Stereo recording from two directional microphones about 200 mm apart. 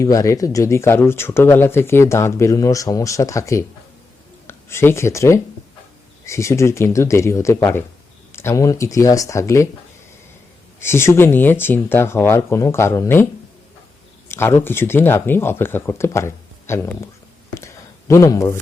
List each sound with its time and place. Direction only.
0.0 s speech: 15° left (ahead or behind)
10.8 s speech: 10° left (ahead or behind)
14.3 s speech: 10° left (ahead or behind)
17.5 s a sound: 15° left (ahead or behind)